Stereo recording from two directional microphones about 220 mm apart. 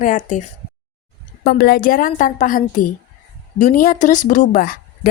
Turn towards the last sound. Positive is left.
turn(degrees=40)  # may be behind; listen again after turning